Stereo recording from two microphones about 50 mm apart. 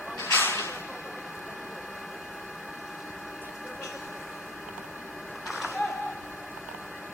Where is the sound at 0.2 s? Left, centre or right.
Left.